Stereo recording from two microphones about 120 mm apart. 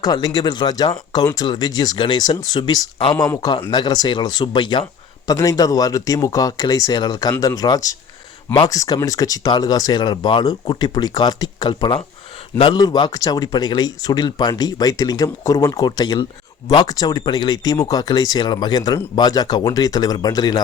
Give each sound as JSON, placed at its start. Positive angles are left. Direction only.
{"t": 0.0, "sound": "a man's voice", "side_deg": 35}
{"t": 5.3, "sound": "speech", "side_deg": 30}